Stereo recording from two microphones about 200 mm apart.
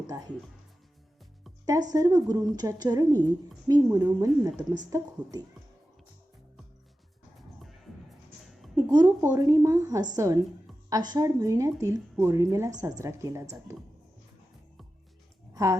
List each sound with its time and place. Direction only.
0.1 s a woman's voice: 20° right (ahead or behind)
1.9 s a woman's voice: 20° right (ahead or behind)
8.7 s a woman's voice: 20° right (ahead or behind)
15.5 s speech: 15° right (ahead or behind)